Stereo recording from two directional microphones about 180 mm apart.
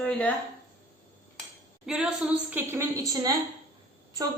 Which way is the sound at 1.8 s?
5° right (ahead or behind).